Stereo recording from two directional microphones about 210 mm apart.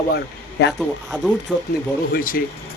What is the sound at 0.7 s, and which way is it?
Speech, centre (ahead or behind).